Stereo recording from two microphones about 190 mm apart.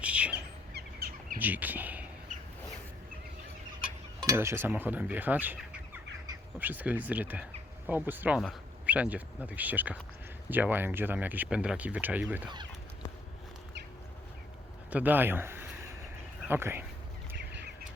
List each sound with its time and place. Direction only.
0.0 s bird: 5° right (ahead or behind)
0.3 s bird: 60° right (ahead or behind)
1.4 s speech: 10° right (ahead or behind)
2.3 s a sound: 40° right (ahead or behind)
4.3 s speech: 15° right (ahead or behind)
14.8 s a sound: 10° right (ahead or behind)
16.5 s speech: 10° right (ahead or behind)